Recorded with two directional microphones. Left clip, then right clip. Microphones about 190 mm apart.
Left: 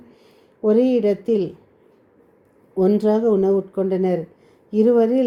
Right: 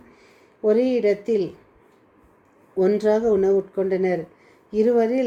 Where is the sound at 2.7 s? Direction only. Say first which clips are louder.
Left 1 dB; 25° left (ahead or behind).